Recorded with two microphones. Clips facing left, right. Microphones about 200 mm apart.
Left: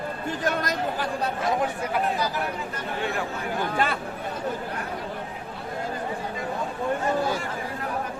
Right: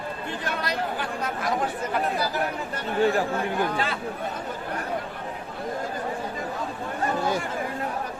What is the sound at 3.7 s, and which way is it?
Speech, 55° left (ahead or behind).